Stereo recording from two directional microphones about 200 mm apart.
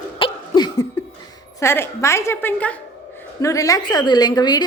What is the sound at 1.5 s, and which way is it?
A woman's voice, 10° left (ahead or behind).